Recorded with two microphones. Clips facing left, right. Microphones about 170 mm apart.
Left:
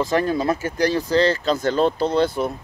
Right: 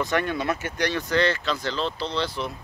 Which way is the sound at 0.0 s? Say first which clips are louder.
Left 5 dB; 35° left (ahead or behind).